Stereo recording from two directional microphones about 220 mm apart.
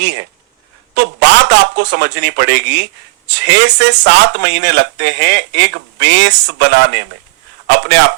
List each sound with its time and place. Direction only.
0.9 s speech: 55° right (ahead or behind)